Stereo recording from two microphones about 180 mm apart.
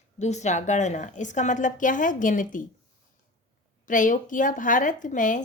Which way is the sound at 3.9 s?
45° left (ahead or behind).